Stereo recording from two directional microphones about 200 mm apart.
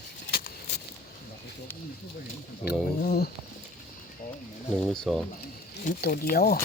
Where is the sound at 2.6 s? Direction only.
50° left (ahead or behind).